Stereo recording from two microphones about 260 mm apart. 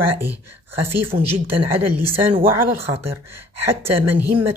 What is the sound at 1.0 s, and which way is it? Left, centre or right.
Speech, right.